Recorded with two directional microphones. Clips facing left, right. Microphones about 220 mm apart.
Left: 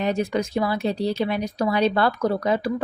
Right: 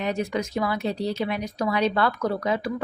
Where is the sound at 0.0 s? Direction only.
30° left (ahead or behind).